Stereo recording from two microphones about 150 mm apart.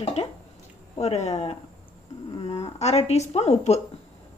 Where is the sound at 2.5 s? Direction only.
45° left (ahead or behind).